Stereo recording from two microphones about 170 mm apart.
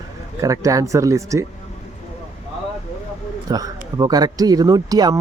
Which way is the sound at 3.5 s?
20° right (ahead or behind).